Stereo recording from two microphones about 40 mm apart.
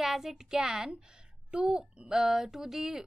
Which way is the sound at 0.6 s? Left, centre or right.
Centre.